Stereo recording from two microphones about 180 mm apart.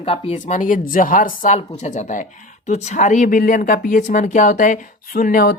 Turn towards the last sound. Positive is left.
turn(degrees=50)  # may be behind; listen again after turning